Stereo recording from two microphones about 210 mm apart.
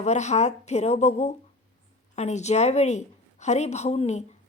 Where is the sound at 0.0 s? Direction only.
35° left (ahead or behind).